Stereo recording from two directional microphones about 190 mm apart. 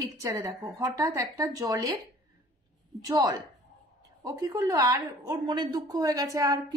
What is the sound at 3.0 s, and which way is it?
A woman's voice, 20° right (ahead or behind).